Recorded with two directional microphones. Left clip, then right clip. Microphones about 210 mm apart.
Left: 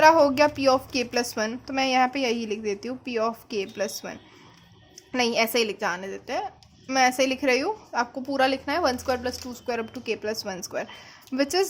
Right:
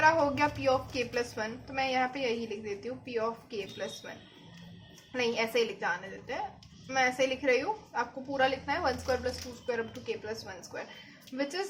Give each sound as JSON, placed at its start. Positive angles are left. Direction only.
{"t": 0.0, "sound": "a woman's voice", "side_deg": 50}
{"t": 5.1, "sound": "a woman's voice", "side_deg": 50}